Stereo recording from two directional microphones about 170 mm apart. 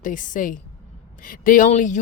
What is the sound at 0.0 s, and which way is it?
Speech, 50° left (ahead or behind).